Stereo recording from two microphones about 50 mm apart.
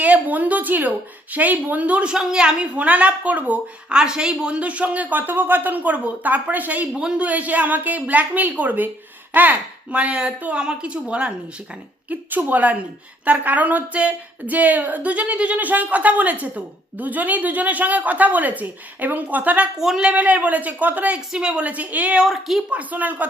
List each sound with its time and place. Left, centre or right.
0.0 s speech: right
2.7 s a woman's voice: right
3.9 s speech: centre; by 6.8 s right
6.9 s a woman's voice: centre
7.3 s speech: right
9.9 s a woman's voice: right
12.5 s a woman's voice: right
21.3 s a woman's voice: centre
22.2 s speech: centre
22.7 s speech: right